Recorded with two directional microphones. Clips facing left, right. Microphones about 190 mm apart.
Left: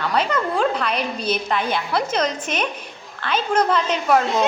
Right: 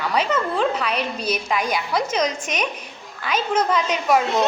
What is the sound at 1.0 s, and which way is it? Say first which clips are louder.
Speech: left 1 dB; 30° left (ahead or behind).